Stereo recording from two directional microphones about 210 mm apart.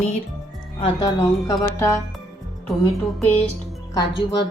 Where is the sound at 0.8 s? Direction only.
20° left (ahead or behind).